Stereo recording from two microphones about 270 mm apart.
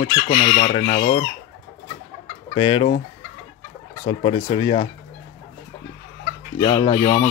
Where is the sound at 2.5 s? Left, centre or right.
Centre.